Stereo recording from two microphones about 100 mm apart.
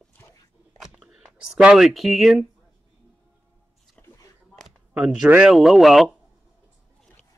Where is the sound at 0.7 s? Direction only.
5° right (ahead or behind).